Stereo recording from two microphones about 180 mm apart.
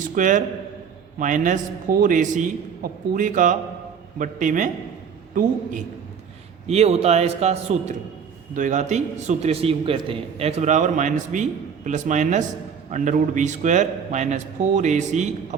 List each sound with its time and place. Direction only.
0.0 s a man's voice: 45° right (ahead or behind)
6.7 s a man's voice: 35° right (ahead or behind)